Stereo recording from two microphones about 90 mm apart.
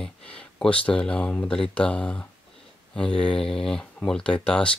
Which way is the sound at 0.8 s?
10° left (ahead or behind).